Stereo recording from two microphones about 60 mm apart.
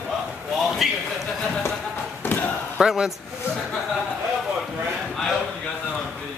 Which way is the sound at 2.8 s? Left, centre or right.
Centre.